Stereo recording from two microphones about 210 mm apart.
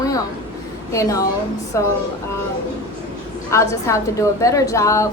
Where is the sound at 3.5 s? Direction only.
15° left (ahead or behind).